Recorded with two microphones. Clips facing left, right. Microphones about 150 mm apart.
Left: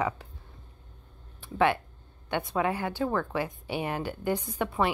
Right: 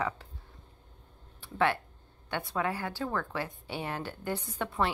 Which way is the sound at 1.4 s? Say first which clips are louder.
Left 3 dB; 15° left (ahead or behind).